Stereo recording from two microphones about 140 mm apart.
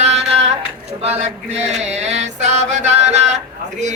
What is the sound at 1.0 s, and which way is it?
Mantra, 50° right (ahead or behind).